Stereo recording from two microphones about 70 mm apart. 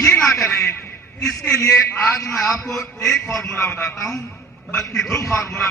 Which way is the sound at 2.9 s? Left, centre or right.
Left.